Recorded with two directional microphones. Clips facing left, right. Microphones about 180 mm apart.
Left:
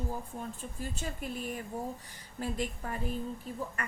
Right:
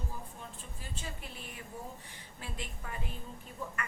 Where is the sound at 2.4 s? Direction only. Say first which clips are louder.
Left 10 dB; 40° left (ahead or behind).